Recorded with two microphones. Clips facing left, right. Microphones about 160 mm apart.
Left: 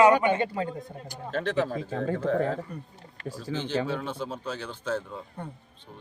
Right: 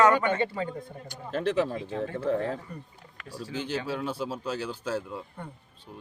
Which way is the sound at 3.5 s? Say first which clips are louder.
Left 3 dB; 10° right (ahead or behind).